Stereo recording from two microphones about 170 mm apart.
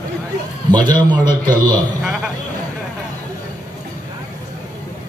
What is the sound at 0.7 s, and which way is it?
A man's voice, 25° right (ahead or behind).